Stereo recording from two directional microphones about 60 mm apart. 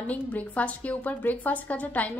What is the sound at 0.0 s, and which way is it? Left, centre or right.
A woman's voice, left.